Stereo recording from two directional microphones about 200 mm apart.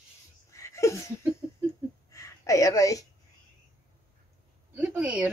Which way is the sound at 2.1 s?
15° left (ahead or behind).